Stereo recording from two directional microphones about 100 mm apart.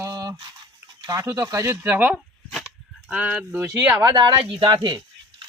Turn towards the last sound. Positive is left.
turn(degrees=-50)  # may be behind; listen again after turning